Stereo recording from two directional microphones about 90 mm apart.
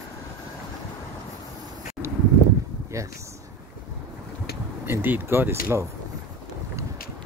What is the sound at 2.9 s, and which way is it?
Speech, 35° right (ahead or behind).